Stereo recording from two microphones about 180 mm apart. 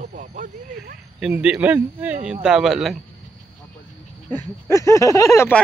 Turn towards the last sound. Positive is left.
turn(degrees=15)  # may be behind; listen again after turning